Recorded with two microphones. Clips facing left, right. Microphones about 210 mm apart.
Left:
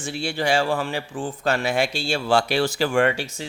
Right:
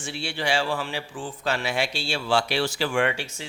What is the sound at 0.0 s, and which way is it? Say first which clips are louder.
Speech: left 5 dB; 45° left (ahead or behind).